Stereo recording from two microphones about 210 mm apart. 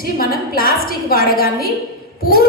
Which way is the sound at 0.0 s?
45° left (ahead or behind).